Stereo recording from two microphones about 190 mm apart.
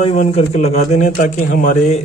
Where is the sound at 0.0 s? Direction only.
35° left (ahead or behind).